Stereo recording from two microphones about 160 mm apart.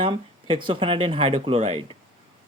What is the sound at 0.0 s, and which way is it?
Speech, 30° right (ahead or behind).